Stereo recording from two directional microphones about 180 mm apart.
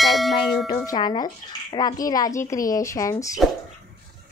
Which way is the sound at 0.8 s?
25° left (ahead or behind).